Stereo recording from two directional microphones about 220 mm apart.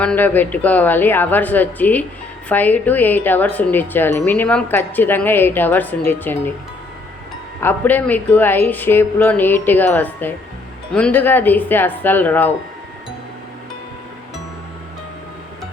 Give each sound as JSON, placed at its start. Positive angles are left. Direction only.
{"t": 0.0, "sound": "speech", "side_deg": 5}
{"t": 7.6, "sound": "speech", "side_deg": 10}